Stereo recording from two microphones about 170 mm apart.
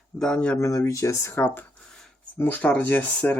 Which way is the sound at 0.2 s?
5° left (ahead or behind).